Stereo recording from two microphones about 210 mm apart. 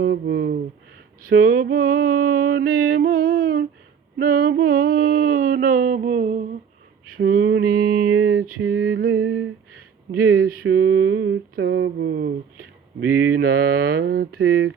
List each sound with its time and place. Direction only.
0.0 s speech: 50° right (ahead or behind)
1.2 s speech: 40° right (ahead or behind)
2.0 s mantra: 45° right (ahead or behind)
2.5 s mantra: 65° right (ahead or behind)
3.1 s humming: 45° right (ahead or behind)
4.2 s mantra: 45° right (ahead or behind)
7.2 s mantra: 50° right (ahead or behind)
8.1 s a sound: 80° right
8.9 s a sound: 55° right (ahead or behind)
10.2 s mantra: 45° right (ahead or behind)
11.0 s mantra: 65° right (ahead or behind)
13.0 s speech: 80° right
13.3 s mantra: 45° right (ahead or behind)